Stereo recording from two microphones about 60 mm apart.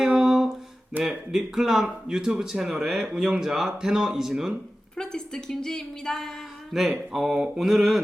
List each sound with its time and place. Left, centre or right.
0.0 s a sound: centre
1.0 s speech: centre
4.9 s a woman's voice: centre